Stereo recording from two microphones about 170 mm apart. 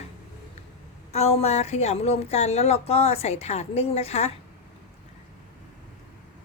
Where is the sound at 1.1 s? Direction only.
40° left (ahead or behind).